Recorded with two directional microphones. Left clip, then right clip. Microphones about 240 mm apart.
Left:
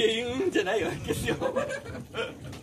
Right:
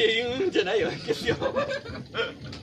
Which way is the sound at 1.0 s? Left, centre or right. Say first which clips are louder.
Right 3 dB; left.